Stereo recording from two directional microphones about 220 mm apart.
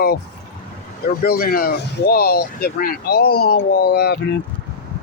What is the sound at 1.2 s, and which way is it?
Speech, 40° left (ahead or behind).